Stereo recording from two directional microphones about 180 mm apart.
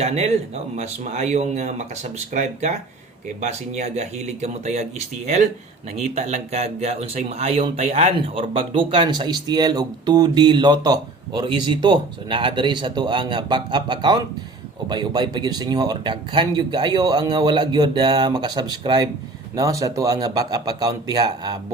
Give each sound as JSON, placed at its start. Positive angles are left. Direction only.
{"t": 0.0, "sound": "speech", "side_deg": -35}